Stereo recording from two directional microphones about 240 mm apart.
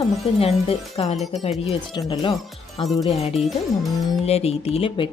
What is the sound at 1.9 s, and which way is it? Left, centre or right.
A woman's voice, centre.